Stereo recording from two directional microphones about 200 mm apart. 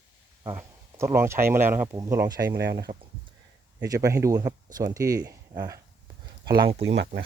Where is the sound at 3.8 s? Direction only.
15° right (ahead or behind).